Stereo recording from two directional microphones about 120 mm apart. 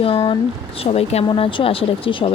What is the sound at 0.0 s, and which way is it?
Speech, 45° left (ahead or behind).